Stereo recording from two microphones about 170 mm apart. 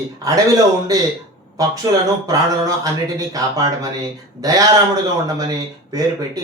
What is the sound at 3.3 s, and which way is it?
Speech, 20° right (ahead or behind).